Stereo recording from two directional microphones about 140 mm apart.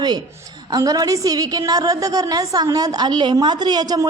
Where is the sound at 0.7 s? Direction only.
25° right (ahead or behind).